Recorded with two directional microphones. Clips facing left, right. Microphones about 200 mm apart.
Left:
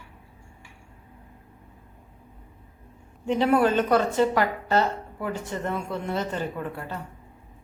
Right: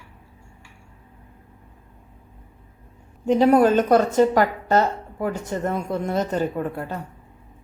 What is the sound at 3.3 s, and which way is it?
A woman's voice, 40° right (ahead or behind).